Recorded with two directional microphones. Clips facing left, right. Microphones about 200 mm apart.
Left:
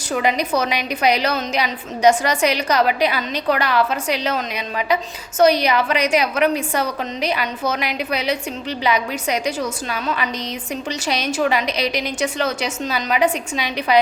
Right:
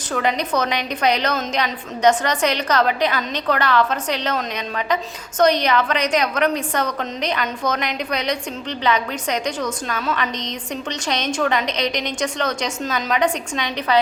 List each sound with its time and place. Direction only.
0.1 s a woman's voice: 10° left (ahead or behind)